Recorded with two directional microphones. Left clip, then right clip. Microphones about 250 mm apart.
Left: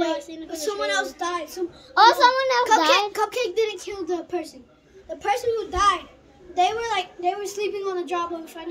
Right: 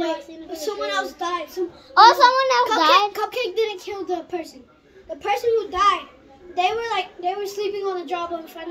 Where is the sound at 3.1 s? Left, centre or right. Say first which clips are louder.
Even; centre.